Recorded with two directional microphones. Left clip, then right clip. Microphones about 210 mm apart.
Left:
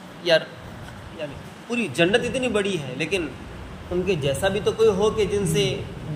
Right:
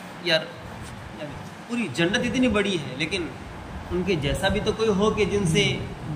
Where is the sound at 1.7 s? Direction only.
25° left (ahead or behind).